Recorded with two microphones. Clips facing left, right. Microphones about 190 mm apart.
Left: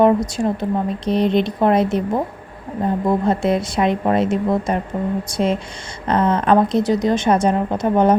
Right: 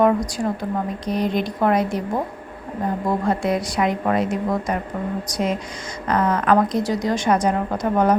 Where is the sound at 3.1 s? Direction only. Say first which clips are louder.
Left 3 dB; 25° left (ahead or behind).